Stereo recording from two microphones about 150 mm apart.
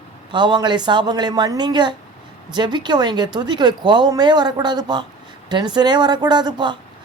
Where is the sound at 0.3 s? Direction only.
30° right (ahead or behind).